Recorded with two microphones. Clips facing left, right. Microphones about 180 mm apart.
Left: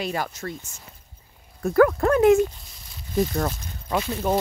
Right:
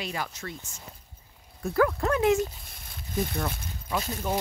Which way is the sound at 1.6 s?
60° left (ahead or behind).